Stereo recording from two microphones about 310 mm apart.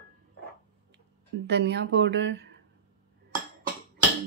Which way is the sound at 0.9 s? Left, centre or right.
Right.